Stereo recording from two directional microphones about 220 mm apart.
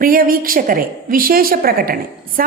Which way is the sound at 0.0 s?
40° right (ahead or behind).